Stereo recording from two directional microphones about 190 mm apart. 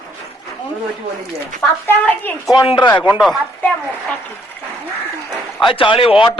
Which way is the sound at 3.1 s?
Centre (ahead or behind).